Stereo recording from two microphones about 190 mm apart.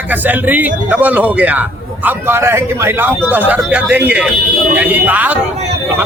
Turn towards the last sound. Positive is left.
turn(degrees=-10)  # may be behind; listen again after turning